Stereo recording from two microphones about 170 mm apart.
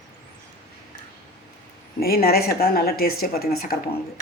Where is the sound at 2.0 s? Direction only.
65° left (ahead or behind).